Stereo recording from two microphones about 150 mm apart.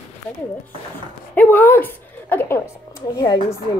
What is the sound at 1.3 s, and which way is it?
A woman's voice, 15° left (ahead or behind).